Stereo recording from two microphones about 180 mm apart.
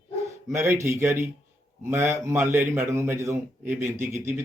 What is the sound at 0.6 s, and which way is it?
Speech, 15° right (ahead or behind).